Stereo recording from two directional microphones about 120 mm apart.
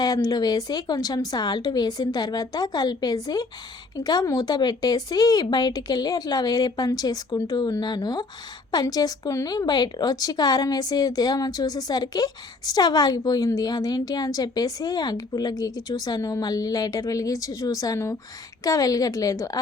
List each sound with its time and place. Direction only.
0.0 s speech: 30° left (ahead or behind)